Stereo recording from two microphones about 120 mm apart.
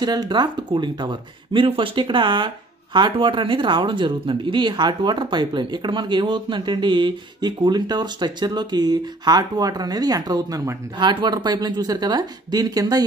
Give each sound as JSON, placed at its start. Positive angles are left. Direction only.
{"t": 0.0, "sound": "speech", "side_deg": -35}
{"t": 11.0, "sound": "speech", "side_deg": -40}